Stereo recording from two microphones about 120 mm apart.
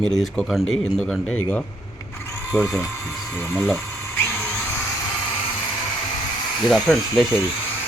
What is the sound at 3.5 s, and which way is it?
Speech, 20° left (ahead or behind).